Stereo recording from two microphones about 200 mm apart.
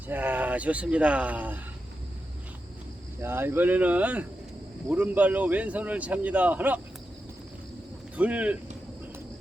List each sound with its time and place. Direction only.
0.1 s a man's voice: 10° right (ahead or behind)
3.2 s a man's voice: 10° right (ahead or behind)
8.1 s a man's voice: 5° right (ahead or behind)